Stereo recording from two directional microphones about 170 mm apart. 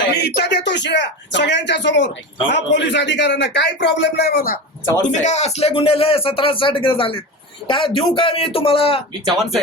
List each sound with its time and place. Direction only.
0.1 s speech: 75° left (ahead or behind)
5.0 s speech: 45° left (ahead or behind)